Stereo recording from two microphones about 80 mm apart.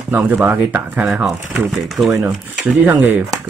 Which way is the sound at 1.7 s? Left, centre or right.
Centre.